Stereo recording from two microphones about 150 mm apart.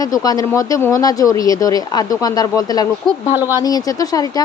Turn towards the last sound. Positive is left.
turn(degrees=25)  # may be behind; listen again after turning